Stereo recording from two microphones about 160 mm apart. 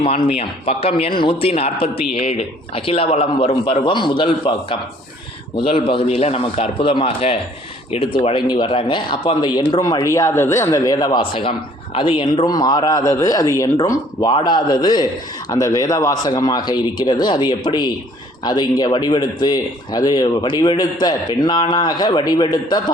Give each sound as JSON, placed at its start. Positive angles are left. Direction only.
{"t": 0.0, "sound": "a man's voice", "side_deg": 35}